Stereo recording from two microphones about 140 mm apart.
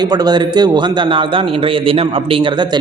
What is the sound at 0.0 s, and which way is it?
A man's voice, 30° right (ahead or behind).